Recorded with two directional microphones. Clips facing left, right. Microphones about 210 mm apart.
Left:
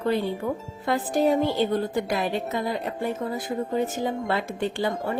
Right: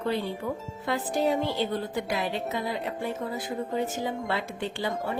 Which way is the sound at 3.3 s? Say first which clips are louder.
Left 4 dB; 45° left (ahead or behind).